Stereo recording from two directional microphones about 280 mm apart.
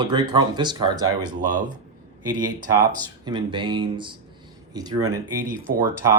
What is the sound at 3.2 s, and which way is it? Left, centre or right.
Speech, centre.